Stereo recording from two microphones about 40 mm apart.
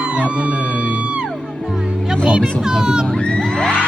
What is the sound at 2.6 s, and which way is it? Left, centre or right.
Speech, centre.